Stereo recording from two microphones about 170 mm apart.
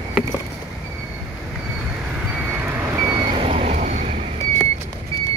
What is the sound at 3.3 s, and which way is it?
Vehicle, 35° right (ahead or behind).